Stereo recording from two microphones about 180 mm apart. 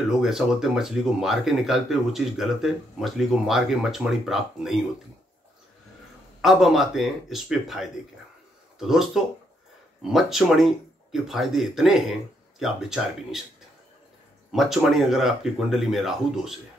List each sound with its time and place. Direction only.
0.2 s speech: centre (ahead or behind)
6.4 s speech: centre (ahead or behind)
14.5 s speech: centre (ahead or behind)